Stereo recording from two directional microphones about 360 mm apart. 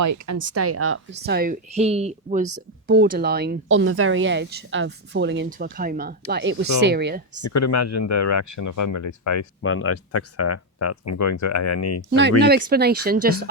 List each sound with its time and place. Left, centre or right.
0.0 s speech: right
7.4 s speech: left
9.6 s speech: left
12.4 s speech: right